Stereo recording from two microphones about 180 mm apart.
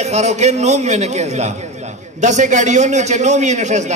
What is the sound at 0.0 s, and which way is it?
A man's voice, 40° right (ahead or behind).